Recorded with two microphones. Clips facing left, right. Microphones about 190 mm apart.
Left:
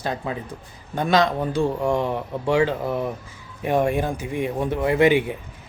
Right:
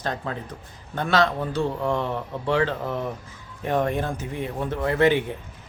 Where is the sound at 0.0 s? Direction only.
10° left (ahead or behind).